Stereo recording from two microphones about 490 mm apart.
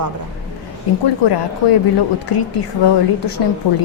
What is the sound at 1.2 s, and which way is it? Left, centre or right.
Speech, left.